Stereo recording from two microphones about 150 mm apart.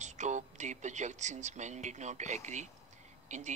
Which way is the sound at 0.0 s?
50° right (ahead or behind).